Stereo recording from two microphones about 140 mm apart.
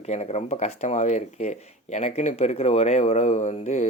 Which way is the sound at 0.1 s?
50° left (ahead or behind).